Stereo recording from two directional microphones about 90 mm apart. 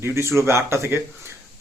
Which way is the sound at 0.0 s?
30° right (ahead or behind).